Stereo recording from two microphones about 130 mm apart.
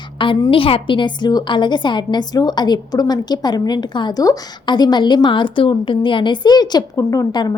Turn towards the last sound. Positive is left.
turn(degrees=30)  # may be behind; listen again after turning